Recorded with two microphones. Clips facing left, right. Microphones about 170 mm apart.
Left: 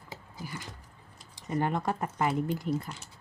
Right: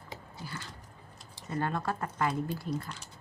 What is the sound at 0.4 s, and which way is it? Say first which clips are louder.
Dog: left 2 dB; 15° left (ahead or behind).